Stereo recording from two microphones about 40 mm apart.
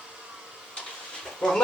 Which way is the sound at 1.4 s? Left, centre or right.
Centre.